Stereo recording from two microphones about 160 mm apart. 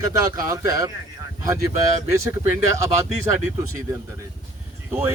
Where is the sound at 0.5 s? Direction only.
20° right (ahead or behind).